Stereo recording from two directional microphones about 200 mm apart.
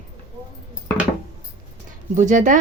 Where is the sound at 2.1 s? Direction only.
40° right (ahead or behind).